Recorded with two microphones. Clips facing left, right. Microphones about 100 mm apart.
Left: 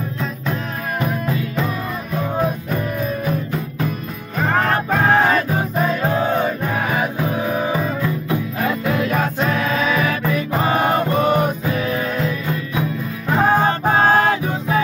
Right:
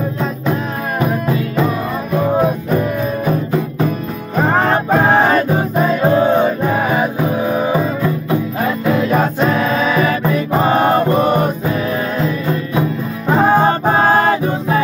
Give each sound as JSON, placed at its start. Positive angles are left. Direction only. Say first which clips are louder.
{"t": 2.4, "sound": "music", "louder": "right 6 dB", "side_deg": -35}
{"t": 4.4, "sound": "music", "louder": "right 4 dB", "side_deg": -30}
{"t": 6.3, "sound": "music", "louder": "right 6 dB", "side_deg": -25}
{"t": 13.3, "sound": "music", "louder": "right 4 dB", "side_deg": -20}
{"t": 13.7, "sound": "music", "louder": "right 3 dB", "side_deg": -35}